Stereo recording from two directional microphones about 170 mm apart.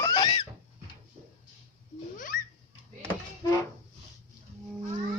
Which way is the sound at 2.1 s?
55° left (ahead or behind).